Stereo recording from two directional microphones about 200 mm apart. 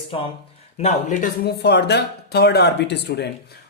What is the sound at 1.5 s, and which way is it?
A man's voice, 55° left (ahead or behind).